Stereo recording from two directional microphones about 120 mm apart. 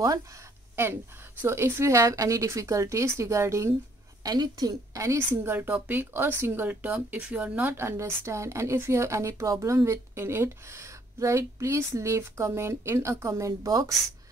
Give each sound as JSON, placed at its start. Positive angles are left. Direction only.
{"t": 1.4, "sound": "a woman's voice", "side_deg": -20}